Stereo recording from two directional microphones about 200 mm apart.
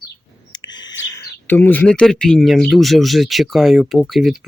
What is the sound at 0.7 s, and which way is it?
Bird vocalization, 20° left (ahead or behind).